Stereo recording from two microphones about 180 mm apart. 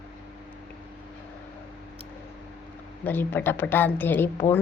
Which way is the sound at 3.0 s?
10° left (ahead or behind).